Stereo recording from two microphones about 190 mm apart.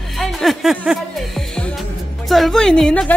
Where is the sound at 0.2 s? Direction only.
Centre (ahead or behind).